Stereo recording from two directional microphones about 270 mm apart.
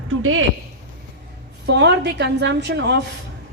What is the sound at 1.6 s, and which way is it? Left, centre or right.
A woman's voice, right.